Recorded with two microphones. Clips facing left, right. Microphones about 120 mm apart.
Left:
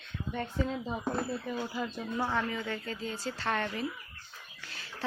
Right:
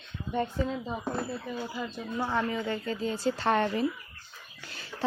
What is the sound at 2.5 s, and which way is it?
Speech, 20° right (ahead or behind).